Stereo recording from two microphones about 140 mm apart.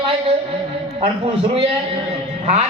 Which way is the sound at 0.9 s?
40° right (ahead or behind).